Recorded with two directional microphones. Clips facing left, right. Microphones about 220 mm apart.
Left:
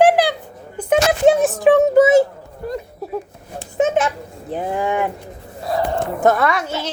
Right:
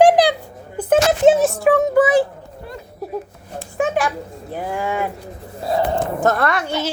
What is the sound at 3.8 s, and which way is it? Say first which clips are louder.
A child's voice: left 2 dB; 20° left (ahead or behind).